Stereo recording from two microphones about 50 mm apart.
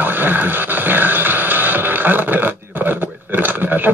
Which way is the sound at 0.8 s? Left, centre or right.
Right.